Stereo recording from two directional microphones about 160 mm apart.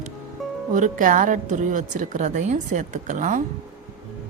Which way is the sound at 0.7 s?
55° right (ahead or behind).